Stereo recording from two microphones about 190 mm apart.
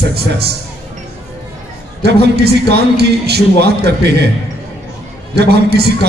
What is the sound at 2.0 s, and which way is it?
A man's voice, 60° right (ahead or behind).